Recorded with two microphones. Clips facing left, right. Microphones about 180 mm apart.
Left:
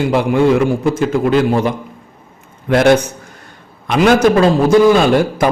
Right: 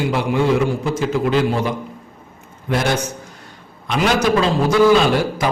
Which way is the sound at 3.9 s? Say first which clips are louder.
Left 6 dB; 50° left (ahead or behind).